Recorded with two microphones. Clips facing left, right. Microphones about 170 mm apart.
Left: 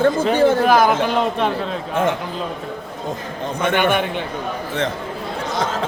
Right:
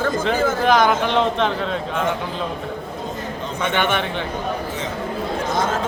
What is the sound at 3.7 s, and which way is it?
Speech, 10° left (ahead or behind).